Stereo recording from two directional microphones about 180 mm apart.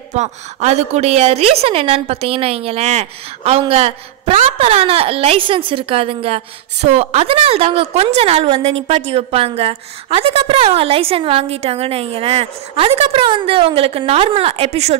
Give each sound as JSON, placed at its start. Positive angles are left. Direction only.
{"t": 0.1, "sound": "a woman's voice", "side_deg": -40}